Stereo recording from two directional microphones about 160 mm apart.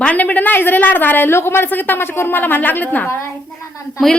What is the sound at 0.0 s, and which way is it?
A woman's voice, 10° left (ahead or behind).